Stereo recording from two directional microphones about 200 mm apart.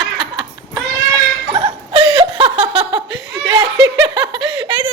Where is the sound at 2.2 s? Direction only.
30° right (ahead or behind).